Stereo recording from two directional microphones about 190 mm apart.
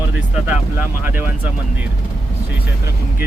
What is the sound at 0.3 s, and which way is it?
Speech, 5° right (ahead or behind).